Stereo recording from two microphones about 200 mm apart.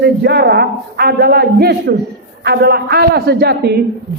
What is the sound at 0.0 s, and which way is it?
A man's voice, 55° right (ahead or behind).